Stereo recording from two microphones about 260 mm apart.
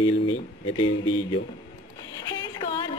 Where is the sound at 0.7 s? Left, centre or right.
Centre.